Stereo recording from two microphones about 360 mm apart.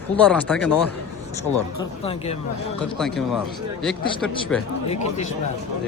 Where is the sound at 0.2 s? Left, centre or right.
Centre.